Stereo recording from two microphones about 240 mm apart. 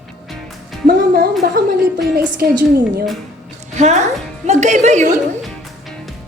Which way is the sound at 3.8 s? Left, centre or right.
Right.